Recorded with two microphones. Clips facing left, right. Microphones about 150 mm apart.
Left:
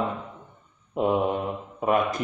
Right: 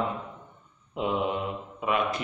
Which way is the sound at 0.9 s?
50° left (ahead or behind).